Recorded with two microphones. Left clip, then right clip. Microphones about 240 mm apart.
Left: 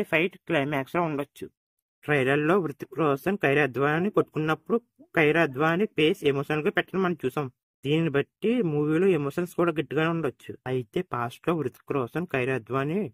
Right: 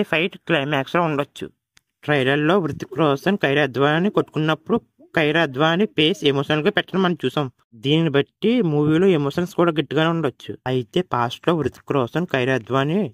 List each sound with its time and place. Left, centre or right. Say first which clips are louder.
0.0 s speech: right 4 dB; right